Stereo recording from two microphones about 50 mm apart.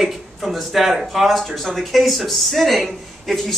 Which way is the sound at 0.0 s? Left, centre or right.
Centre.